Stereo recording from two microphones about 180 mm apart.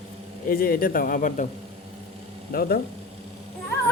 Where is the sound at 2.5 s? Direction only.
55° left (ahead or behind).